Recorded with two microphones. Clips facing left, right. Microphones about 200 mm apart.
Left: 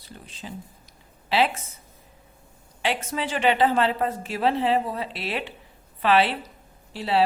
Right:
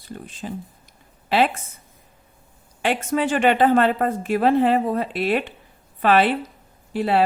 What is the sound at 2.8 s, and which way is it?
A woman's voice, 50° right (ahead or behind).